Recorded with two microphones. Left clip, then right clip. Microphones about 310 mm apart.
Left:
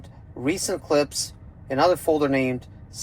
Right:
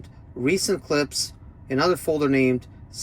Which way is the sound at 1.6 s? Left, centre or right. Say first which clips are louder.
Left 2 dB; centre.